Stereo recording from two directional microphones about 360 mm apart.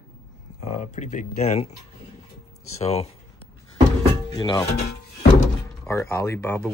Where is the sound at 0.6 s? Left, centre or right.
Centre.